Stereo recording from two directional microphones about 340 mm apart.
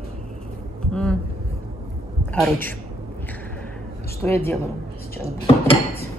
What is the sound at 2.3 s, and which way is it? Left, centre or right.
Speech, centre.